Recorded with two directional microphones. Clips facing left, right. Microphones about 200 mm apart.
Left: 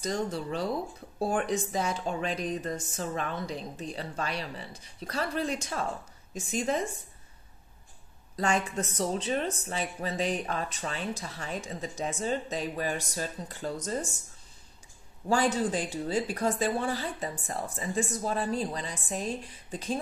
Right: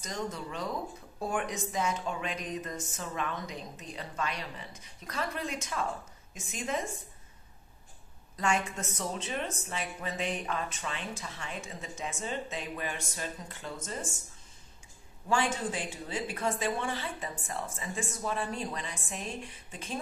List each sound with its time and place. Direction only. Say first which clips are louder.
0.0 s speech: left 6 dB; 35° left (ahead or behind)
8.4 s speech: left 3 dB; 35° left (ahead or behind)
15.2 s speech: left 4 dB; 35° left (ahead or behind)